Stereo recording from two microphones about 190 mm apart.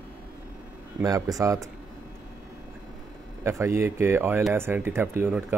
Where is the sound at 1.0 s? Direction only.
20° right (ahead or behind).